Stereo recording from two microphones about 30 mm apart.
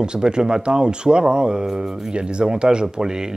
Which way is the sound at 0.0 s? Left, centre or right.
Right.